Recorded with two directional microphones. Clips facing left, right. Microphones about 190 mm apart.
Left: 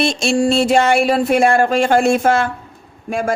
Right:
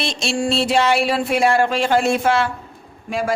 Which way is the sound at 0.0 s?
50° left (ahead or behind).